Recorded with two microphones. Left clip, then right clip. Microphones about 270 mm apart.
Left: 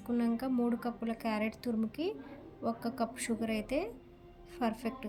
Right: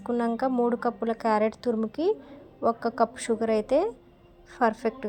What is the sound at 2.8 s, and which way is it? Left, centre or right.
Speech, centre.